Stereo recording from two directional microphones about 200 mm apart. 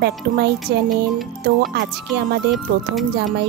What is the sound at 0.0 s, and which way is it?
Speech, 55° right (ahead or behind).